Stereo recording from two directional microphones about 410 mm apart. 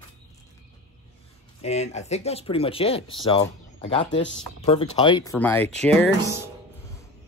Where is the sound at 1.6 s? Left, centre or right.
Centre.